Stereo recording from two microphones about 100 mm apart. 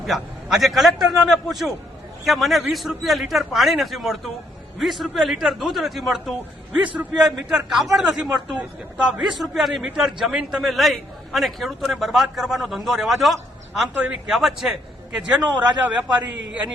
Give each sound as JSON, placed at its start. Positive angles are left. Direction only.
{"t": 0.0, "sound": "a man's voice", "side_deg": 0}
{"t": 6.8, "sound": "a man's voice", "side_deg": -15}
{"t": 7.2, "sound": "a man's voice", "side_deg": -5}
{"t": 13.9, "sound": "a man's voice", "side_deg": -15}
{"t": 14.3, "sound": "a man's voice", "side_deg": -5}